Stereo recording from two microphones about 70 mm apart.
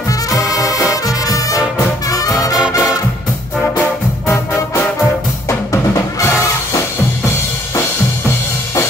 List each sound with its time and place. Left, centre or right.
0.3 s music: left
5.5 s music: left